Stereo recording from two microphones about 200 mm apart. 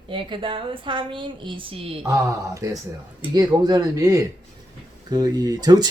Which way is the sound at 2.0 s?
15° right (ahead or behind).